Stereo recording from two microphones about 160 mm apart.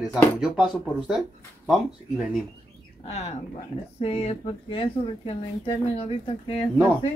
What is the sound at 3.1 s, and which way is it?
Speech, 40° left (ahead or behind).